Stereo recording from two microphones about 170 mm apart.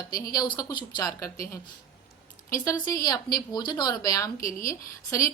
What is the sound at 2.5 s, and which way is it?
A woman's voice, 20° left (ahead or behind).